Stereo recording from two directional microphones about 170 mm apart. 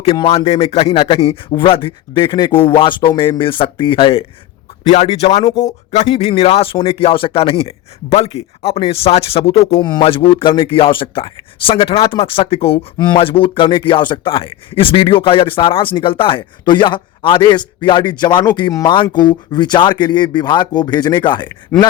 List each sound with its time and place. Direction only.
0.3 s a man's voice: 35° left (ahead or behind)